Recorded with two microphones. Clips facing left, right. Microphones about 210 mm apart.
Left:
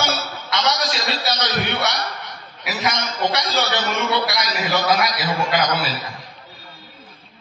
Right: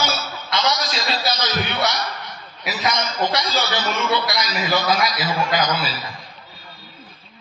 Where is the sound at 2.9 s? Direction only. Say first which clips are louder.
Even; 65° left (ahead or behind).